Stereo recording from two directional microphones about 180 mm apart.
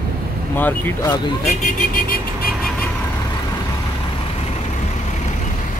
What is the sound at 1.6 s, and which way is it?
Vehicle, 50° left (ahead or behind).